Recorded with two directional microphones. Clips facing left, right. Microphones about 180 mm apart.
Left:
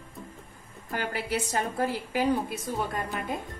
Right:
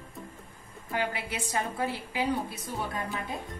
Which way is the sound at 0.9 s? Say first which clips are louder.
Left 2 dB; 40° left (ahead or behind).